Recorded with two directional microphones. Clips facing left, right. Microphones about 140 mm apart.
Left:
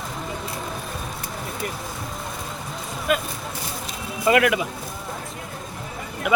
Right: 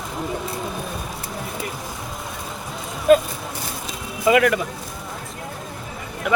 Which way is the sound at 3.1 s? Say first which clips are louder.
Right 10 dB; 35° right (ahead or behind).